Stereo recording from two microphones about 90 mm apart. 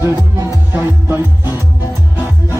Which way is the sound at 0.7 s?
25° right (ahead or behind).